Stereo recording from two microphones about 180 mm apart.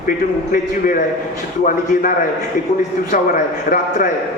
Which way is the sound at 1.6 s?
45° left (ahead or behind).